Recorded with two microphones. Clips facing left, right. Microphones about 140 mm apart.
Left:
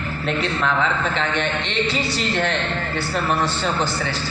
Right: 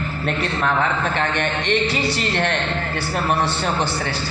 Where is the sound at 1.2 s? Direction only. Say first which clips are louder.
Right 1 dB; 55° right (ahead or behind).